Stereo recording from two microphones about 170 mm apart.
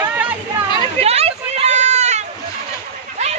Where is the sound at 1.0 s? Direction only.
35° right (ahead or behind).